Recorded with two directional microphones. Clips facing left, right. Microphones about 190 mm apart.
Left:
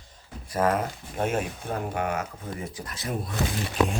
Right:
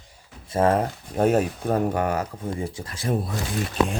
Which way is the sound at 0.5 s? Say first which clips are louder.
Right 4 dB; 30° right (ahead or behind).